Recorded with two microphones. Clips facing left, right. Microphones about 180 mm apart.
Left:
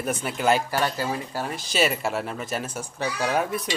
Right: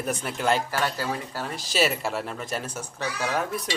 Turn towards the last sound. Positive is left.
turn(degrees=10)  # may be behind; listen again after turning